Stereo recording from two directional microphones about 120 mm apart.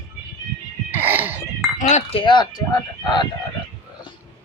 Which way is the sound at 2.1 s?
45° left (ahead or behind).